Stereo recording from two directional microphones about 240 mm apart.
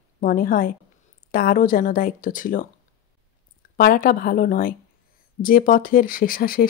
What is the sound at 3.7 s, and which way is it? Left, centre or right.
Speech, left.